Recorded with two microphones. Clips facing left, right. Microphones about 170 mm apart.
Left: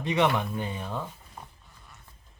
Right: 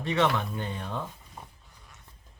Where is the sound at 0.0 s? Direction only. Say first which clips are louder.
Left 1 dB; 15° left (ahead or behind).